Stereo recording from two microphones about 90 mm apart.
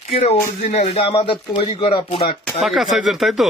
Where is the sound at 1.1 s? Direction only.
75° left (ahead or behind).